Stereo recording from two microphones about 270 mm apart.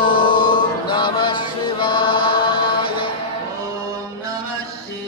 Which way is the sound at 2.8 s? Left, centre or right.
Centre.